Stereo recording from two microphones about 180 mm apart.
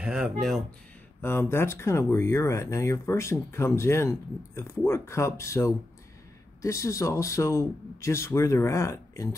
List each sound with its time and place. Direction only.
0.0 s speech: 5° right (ahead or behind)
1.2 s speech: 15° left (ahead or behind)